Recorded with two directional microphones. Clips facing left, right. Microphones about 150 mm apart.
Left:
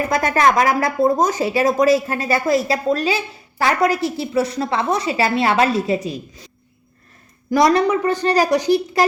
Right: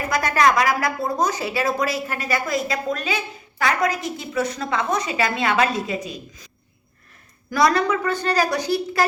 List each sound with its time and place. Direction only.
0.4 s a woman's voice: 45° left (ahead or behind); by 6.5 s 30° left (ahead or behind)
7.5 s a woman's voice: 20° left (ahead or behind)